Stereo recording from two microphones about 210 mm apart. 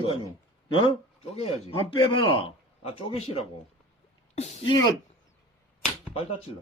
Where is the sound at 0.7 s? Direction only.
25° left (ahead or behind).